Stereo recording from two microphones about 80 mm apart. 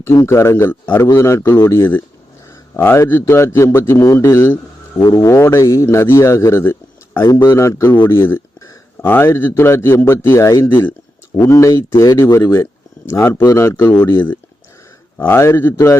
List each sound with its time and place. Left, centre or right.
0.2 s a man's voice: left
1.1 s a man's voice: left
7.3 s speech: left
7.5 s a man's voice: left
15.2 s a man's voice: left